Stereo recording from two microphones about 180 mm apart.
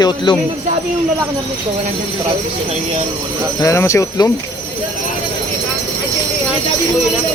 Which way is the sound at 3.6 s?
15° left (ahead or behind).